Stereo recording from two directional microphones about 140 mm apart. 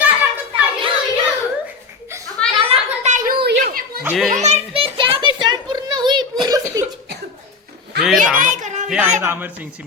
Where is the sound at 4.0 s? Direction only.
10° right (ahead or behind).